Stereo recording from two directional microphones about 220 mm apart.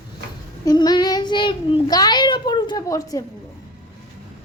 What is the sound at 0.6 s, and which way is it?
A child's voice, 15° left (ahead or behind).